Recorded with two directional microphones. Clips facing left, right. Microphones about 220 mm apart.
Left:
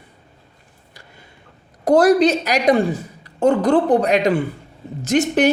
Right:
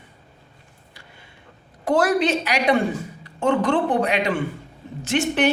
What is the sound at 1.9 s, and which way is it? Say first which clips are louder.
A woman's voice: left 6 dB; 40° left (ahead or behind).